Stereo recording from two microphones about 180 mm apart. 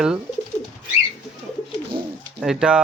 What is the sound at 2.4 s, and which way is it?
Speech, 5° right (ahead or behind).